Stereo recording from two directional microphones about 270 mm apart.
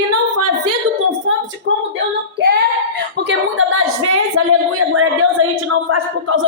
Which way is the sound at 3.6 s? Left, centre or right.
Right.